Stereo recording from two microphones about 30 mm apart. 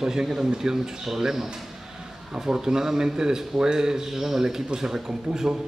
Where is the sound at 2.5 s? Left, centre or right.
Right.